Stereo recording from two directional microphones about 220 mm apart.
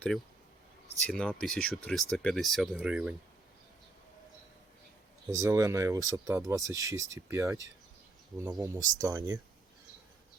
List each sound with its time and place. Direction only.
1.0 s speech: 5° left (ahead or behind)
5.3 s speech: 15° right (ahead or behind)